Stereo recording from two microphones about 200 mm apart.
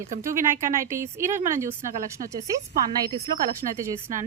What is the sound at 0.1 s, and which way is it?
Speech, 40° right (ahead or behind).